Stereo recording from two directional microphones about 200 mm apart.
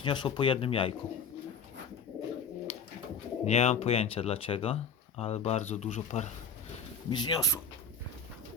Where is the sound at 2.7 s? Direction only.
30° left (ahead or behind).